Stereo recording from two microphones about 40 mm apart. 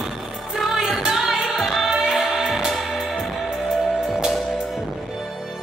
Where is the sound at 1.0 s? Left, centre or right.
Centre.